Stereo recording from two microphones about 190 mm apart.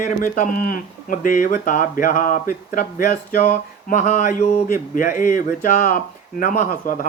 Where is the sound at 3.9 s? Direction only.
40° left (ahead or behind).